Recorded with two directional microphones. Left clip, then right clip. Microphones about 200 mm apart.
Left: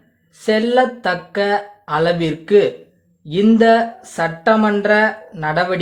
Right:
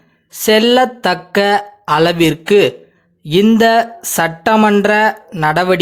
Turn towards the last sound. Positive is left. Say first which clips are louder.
# right 5 dB
turn(degrees=-35)  # may be behind; listen again after turning